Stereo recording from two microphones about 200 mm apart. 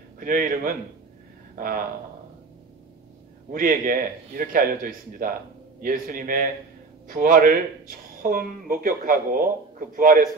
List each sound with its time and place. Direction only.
0.2 s speech: 45° right (ahead or behind)
3.5 s speech: 45° right (ahead or behind)